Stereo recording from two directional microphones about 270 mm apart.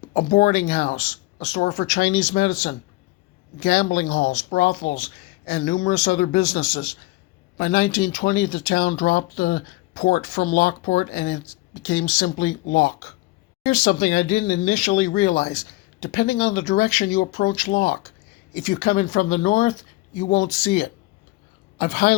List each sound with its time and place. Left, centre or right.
0.1 s speech: left